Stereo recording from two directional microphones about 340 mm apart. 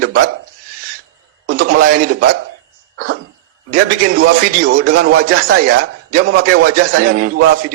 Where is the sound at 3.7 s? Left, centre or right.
Right.